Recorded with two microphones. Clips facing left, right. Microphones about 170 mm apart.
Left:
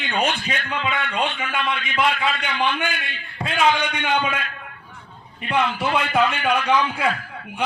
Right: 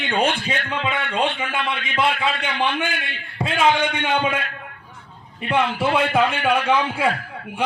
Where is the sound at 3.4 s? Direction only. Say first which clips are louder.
Right 1 dB; 25° right (ahead or behind).